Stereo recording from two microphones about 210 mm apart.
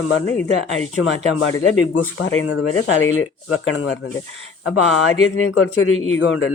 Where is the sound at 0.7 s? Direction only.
65° left (ahead or behind).